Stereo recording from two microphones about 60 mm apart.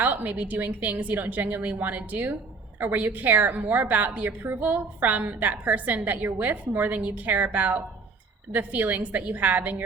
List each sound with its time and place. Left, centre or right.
0.0 s a woman's voice: right